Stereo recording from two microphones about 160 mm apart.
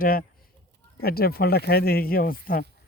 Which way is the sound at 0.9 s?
75° left (ahead or behind).